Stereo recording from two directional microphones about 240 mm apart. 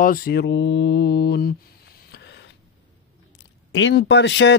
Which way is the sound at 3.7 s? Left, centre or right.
Left.